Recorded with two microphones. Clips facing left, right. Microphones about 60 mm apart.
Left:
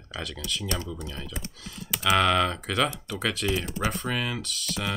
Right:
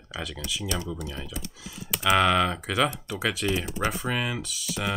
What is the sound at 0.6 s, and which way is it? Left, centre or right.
Speech, left.